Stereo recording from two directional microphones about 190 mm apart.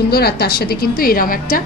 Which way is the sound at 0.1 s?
55° left (ahead or behind).